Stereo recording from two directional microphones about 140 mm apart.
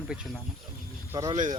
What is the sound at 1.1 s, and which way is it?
Speech, 25° right (ahead or behind).